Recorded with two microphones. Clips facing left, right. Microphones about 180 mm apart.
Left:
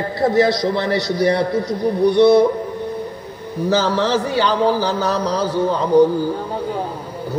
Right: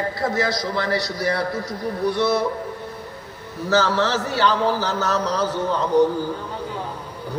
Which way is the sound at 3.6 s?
15° left (ahead or behind).